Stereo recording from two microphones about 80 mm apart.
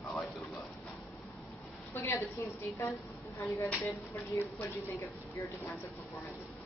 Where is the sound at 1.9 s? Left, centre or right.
Left.